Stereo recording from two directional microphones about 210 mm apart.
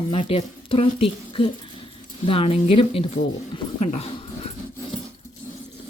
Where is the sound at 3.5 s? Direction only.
30° left (ahead or behind).